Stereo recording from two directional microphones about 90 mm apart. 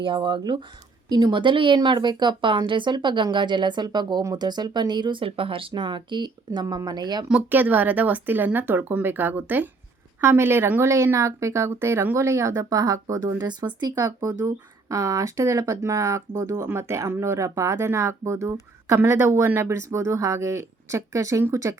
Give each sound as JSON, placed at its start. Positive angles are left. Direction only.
{"t": 0.0, "sound": "speech", "side_deg": -60}
{"t": 7.5, "sound": "speech", "side_deg": -20}
{"t": 13.5, "sound": "speech", "side_deg": -55}
{"t": 13.9, "sound": "speech", "side_deg": -35}